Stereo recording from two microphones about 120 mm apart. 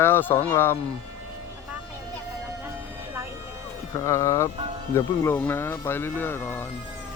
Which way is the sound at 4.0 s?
25° left (ahead or behind).